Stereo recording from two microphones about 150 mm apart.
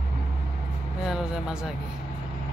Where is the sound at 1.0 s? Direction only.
5° right (ahead or behind).